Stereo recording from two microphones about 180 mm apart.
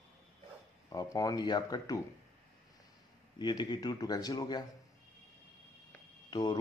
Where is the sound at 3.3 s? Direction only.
25° left (ahead or behind).